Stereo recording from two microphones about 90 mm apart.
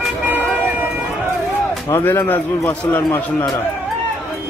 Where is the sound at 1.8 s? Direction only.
30° left (ahead or behind).